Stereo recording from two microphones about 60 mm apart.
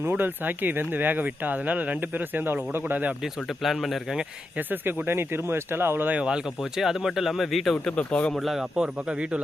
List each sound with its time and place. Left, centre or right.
0.1 s speech: right
3.6 s speech: centre
4.5 s speech: right
6.6 s speech: centre
7.9 s speech: centre
8.4 s speech: centre
8.7 s speech: centre